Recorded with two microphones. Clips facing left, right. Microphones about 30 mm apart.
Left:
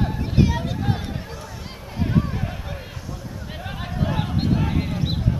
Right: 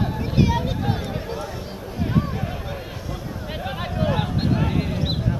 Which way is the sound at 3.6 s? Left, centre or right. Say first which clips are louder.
Right 2 dB; centre.